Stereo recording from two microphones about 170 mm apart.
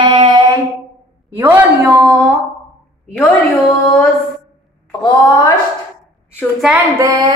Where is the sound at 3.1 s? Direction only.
10° left (ahead or behind).